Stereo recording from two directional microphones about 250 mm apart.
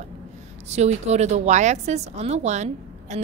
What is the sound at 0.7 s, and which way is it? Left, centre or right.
A woman's voice, right.